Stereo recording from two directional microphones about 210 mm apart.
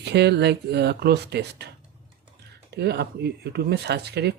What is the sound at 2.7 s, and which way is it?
Speech, 50° right (ahead or behind).